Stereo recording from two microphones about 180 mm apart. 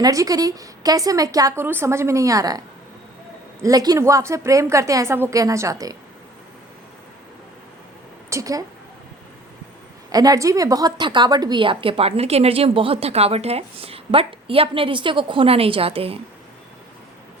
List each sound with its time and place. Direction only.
0.0 s a woman's voice: 20° right (ahead or behind)
3.6 s a woman's voice: 20° right (ahead or behind)
8.3 s speech: 20° right (ahead or behind)
10.1 s a woman's voice: 20° right (ahead or behind)